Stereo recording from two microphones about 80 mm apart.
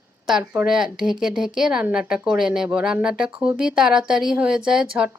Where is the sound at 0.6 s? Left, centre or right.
Centre.